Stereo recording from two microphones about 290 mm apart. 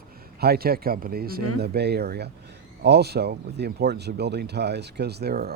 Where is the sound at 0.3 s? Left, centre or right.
Right.